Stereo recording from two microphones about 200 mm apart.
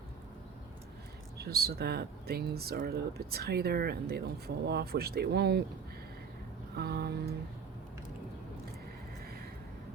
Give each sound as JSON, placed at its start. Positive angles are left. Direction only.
{"t": 1.4, "sound": "speech", "side_deg": -50}
{"t": 6.7, "sound": "speech", "side_deg": -50}